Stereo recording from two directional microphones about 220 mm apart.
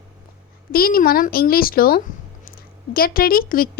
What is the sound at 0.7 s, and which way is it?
A woman's voice, 40° left (ahead or behind).